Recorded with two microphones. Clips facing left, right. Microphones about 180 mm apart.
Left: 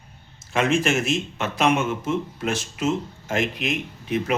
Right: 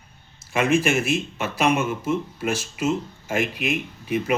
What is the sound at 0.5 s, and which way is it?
Speech, 5° right (ahead or behind).